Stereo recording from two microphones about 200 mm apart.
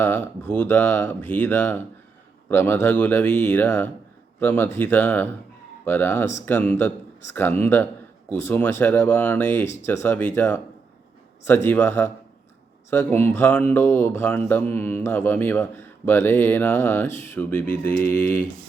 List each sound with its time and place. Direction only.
0.0 s mantra: 10° left (ahead or behind)